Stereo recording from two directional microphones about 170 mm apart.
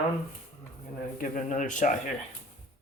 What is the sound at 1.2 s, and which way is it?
Speech, 50° left (ahead or behind).